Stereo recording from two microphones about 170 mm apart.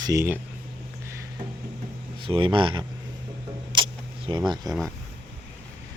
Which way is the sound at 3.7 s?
30° right (ahead or behind).